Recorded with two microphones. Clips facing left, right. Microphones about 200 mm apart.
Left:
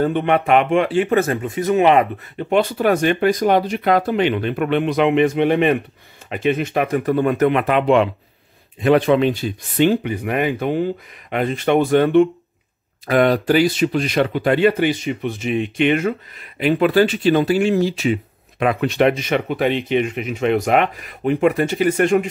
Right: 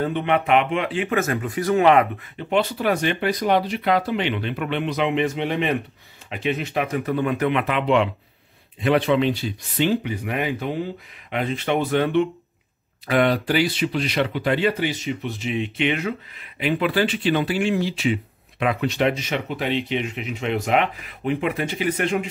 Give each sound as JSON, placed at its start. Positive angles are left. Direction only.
{"t": 0.0, "sound": "speech", "side_deg": 45}
{"t": 2.3, "sound": "speech", "side_deg": 50}